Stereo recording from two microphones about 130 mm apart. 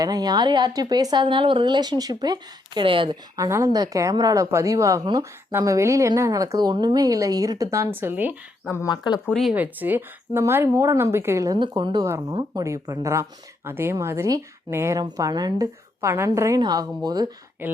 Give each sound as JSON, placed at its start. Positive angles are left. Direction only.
{"t": 0.0, "sound": "speech", "side_deg": -30}
{"t": 3.3, "sound": "a woman's voice", "side_deg": -25}
{"t": 8.9, "sound": "speech", "side_deg": 35}
{"t": 9.3, "sound": "speech", "side_deg": 0}
{"t": 9.6, "sound": "a woman's voice", "side_deg": -15}
{"t": 11.6, "sound": "speech", "side_deg": -35}
{"t": 12.6, "sound": "a woman's voice", "side_deg": -25}
{"t": 16.6, "sound": "speech", "side_deg": -30}
{"t": 17.6, "sound": "speech", "side_deg": -15}